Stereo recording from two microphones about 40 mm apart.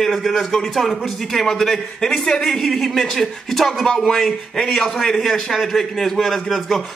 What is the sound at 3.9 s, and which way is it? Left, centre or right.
Speech, centre.